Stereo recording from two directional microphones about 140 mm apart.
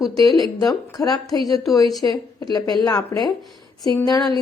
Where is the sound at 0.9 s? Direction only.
30° left (ahead or behind).